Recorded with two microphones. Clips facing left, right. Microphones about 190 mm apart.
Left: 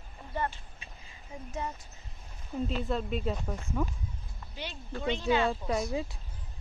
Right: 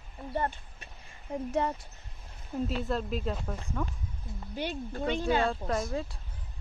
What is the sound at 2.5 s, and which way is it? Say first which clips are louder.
Speech: right 1 dB; centre (ahead or behind).